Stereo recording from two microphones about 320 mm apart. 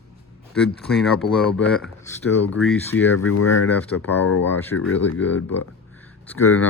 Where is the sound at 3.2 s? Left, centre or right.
Left.